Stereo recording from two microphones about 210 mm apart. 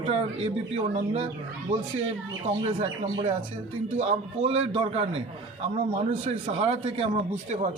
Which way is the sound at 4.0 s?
30° right (ahead or behind).